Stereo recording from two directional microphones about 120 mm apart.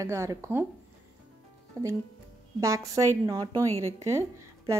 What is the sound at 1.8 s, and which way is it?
Speech, 25° right (ahead or behind).